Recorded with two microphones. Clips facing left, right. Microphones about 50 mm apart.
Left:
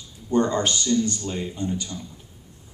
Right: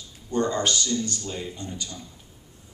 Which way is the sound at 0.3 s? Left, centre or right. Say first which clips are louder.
Left 3 dB; left.